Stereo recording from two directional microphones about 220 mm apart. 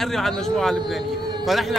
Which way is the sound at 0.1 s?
Centre (ahead or behind).